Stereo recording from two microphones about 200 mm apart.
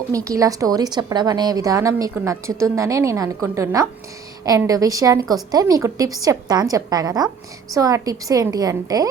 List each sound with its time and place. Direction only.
0.1 s a woman's voice: 15° right (ahead or behind)